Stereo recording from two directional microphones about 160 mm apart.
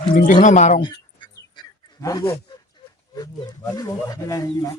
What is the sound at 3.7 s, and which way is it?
Speech, 20° left (ahead or behind).